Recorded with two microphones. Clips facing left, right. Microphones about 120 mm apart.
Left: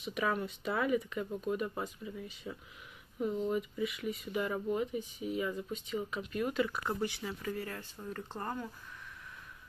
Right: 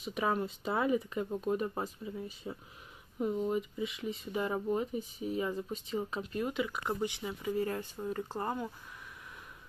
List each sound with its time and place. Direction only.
0.0 s speech: 30° right (ahead or behind)
3.3 s speech: 10° right (ahead or behind)
3.5 s speech: 30° right (ahead or behind)
6.5 s speech: 15° right (ahead or behind)